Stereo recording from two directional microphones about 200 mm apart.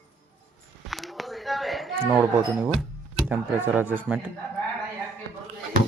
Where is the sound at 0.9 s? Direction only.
Centre (ahead or behind).